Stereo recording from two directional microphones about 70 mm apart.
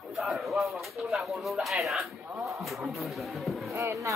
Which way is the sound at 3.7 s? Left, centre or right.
Right.